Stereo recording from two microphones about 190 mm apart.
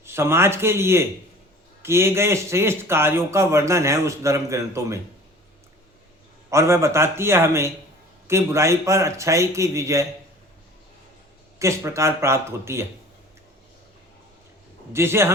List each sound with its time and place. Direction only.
0.0 s speech: 15° right (ahead or behind)
6.5 s speech: 15° right (ahead or behind)
11.6 s speech: 15° right (ahead or behind)
14.9 s speech: 15° right (ahead or behind)